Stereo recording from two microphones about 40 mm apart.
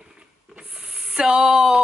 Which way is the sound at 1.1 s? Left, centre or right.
Centre.